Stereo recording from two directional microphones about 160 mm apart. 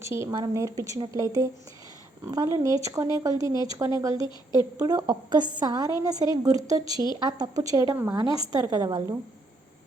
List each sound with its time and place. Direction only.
0.0 s a woman's voice: 15° right (ahead or behind)